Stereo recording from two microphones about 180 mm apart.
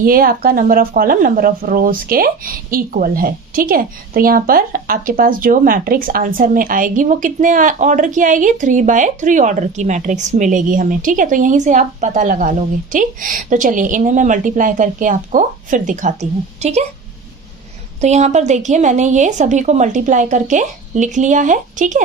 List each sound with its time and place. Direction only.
0.0 s speech: 50° right (ahead or behind)
18.0 s speech: 40° right (ahead or behind)